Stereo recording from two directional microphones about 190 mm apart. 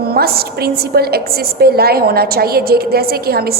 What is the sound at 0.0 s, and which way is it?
A woman's voice, 55° right (ahead or behind).